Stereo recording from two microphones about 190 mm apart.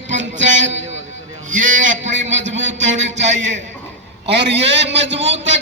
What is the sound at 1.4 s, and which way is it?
Speech, 90° right.